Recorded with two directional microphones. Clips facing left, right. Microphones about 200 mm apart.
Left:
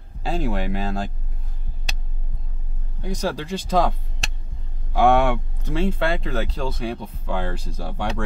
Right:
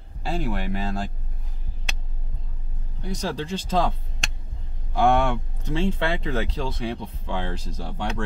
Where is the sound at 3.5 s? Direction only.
10° left (ahead or behind).